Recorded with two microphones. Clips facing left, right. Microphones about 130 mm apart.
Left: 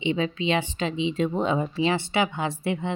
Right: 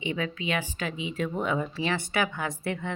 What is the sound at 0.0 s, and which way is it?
A woman's voice, 20° left (ahead or behind).